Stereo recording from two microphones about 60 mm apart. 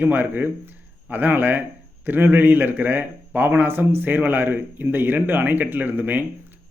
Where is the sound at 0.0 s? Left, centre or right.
Right.